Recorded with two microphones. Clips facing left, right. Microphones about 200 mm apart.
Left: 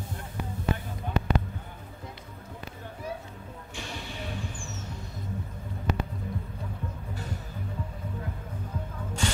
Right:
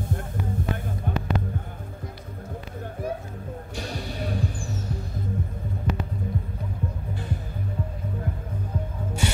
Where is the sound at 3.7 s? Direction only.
40° right (ahead or behind).